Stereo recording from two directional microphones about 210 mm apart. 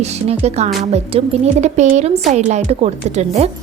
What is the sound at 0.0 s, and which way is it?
A woman's voice, 30° right (ahead or behind).